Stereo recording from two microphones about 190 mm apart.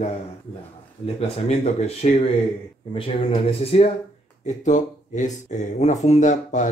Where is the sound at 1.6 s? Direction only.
35° left (ahead or behind).